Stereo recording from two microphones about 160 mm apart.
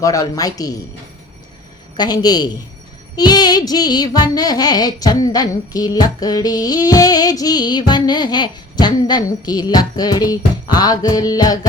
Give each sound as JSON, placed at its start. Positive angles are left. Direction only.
{"t": 0.0, "sound": "music", "side_deg": 20}
{"t": 2.0, "sound": "music", "side_deg": 25}